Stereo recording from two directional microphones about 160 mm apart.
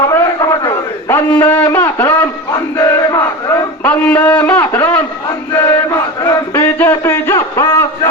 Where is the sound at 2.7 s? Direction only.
20° left (ahead or behind).